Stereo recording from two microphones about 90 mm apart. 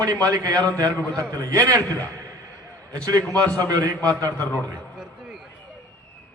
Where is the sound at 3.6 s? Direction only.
45° right (ahead or behind).